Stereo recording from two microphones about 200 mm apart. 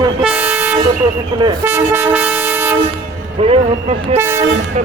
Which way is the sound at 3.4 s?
30° right (ahead or behind).